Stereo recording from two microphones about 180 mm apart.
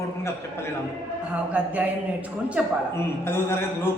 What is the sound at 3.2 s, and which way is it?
Speech, 15° left (ahead or behind).